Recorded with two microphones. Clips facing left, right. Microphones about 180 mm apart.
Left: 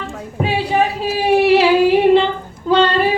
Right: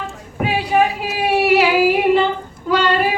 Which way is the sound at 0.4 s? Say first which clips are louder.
Right 1 dB; 30° left (ahead or behind).